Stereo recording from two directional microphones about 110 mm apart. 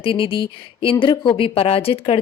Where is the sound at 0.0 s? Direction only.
55° left (ahead or behind).